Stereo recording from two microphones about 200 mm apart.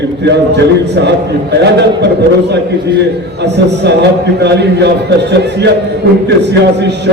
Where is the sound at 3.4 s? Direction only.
60° right (ahead or behind).